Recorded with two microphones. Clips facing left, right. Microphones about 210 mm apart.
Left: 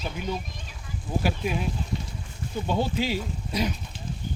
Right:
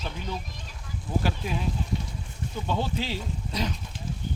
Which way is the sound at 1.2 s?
15° left (ahead or behind).